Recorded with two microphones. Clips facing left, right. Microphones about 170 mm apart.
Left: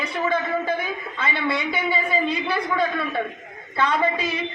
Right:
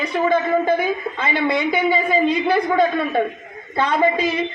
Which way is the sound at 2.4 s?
45° right (ahead or behind).